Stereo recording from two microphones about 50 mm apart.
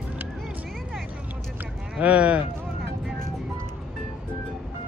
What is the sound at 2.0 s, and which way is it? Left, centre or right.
Speech, right.